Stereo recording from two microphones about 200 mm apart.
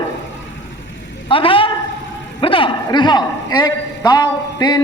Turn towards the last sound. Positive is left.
turn(degrees=20)  # may be behind; listen again after turning